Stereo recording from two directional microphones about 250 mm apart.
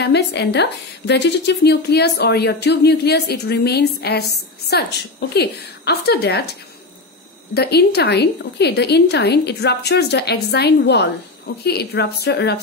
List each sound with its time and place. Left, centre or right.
0.0 s a woman's voice: left
7.5 s a woman's voice: left